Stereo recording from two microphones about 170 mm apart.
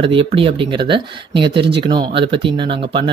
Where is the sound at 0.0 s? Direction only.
30° right (ahead or behind).